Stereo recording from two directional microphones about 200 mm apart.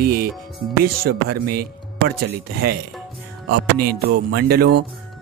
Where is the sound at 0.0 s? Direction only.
50° right (ahead or behind).